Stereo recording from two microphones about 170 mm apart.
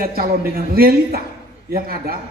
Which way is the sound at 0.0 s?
60° right (ahead or behind).